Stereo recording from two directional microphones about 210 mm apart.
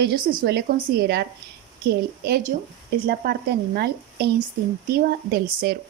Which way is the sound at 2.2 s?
50° right (ahead or behind).